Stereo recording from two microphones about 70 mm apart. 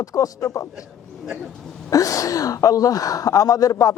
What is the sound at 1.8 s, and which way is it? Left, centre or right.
Speech, left.